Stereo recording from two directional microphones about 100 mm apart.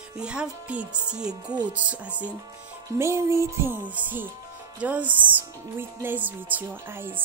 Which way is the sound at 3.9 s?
15° right (ahead or behind).